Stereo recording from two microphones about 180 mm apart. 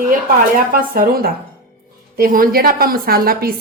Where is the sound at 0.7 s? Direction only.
55° right (ahead or behind).